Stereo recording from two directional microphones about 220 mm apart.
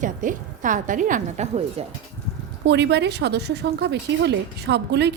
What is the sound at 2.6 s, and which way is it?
Speech, 50° right (ahead or behind).